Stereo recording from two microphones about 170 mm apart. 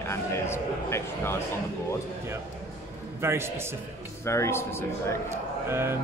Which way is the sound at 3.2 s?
15° right (ahead or behind).